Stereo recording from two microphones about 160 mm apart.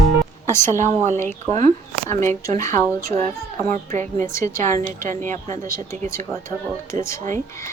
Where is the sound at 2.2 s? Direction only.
20° left (ahead or behind).